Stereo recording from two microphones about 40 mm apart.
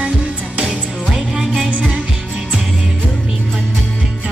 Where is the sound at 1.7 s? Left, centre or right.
Right.